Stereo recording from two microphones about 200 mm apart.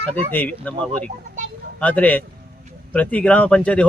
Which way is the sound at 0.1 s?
10° left (ahead or behind).